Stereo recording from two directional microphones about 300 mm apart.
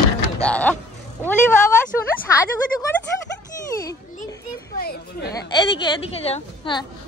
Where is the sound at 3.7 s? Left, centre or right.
Centre.